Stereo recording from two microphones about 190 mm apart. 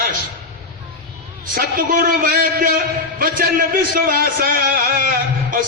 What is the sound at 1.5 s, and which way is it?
A man's voice, 50° right (ahead or behind).